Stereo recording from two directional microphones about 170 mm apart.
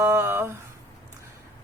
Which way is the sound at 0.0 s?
15° right (ahead or behind).